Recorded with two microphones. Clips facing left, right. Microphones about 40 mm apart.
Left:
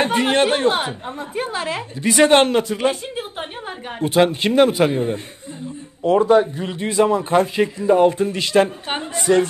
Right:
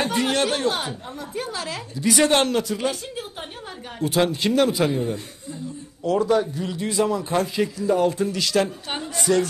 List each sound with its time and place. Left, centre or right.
0.0 s a woman's voice: left